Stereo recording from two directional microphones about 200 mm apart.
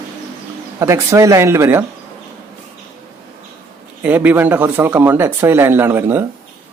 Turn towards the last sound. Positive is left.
turn(degrees=-10)  # may be behind; listen again after turning